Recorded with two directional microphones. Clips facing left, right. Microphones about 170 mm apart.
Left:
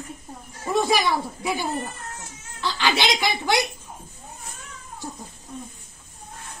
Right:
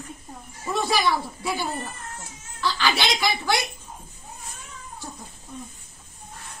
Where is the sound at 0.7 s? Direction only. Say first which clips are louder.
Left 2 dB; 15° left (ahead or behind).